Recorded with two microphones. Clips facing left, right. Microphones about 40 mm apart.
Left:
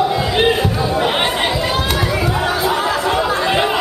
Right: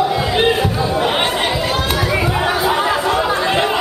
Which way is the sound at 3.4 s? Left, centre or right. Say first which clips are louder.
Even; centre.